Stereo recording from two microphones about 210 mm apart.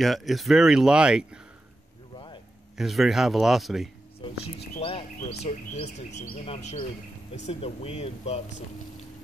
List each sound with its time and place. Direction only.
0.0 s speech: centre (ahead or behind)
2.8 s speech: centre (ahead or behind)
4.7 s a sound: 30° left (ahead or behind)
5.4 s speech: 30° left (ahead or behind)